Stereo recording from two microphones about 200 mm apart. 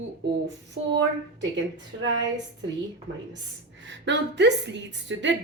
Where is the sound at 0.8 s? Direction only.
70° right (ahead or behind).